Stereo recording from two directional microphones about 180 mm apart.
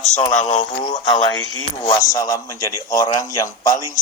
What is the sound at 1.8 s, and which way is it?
A man's voice, 20° left (ahead or behind).